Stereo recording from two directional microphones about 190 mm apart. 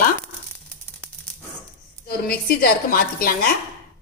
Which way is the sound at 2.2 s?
50° left (ahead or behind).